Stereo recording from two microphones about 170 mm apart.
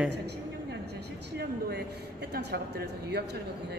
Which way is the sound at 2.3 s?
75° right (ahead or behind).